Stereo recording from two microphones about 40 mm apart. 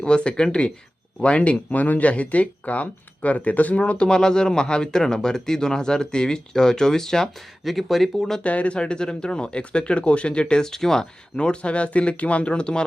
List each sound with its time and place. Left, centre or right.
0.0 s speech: left
1.7 s speech: left; by 7.3 s centre
7.6 s speech: centre
8.4 s speech: left; by 11.1 s centre
11.3 s speech: left